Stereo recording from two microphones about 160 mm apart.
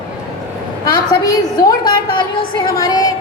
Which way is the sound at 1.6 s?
25° left (ahead or behind).